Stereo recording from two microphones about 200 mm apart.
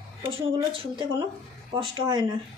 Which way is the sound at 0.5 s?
25° right (ahead or behind).